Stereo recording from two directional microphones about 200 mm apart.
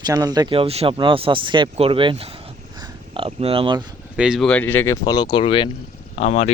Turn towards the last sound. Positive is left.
turn(degrees=30)  # may be behind; listen again after turning